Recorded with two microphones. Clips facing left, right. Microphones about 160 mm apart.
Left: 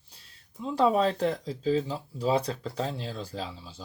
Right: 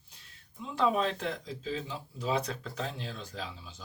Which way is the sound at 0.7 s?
35° left (ahead or behind).